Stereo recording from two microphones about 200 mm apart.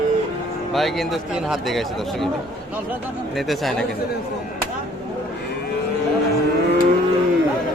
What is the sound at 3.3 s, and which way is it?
Speech, centre (ahead or behind).